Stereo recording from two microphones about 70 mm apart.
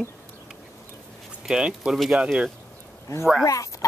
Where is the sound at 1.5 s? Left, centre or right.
Centre.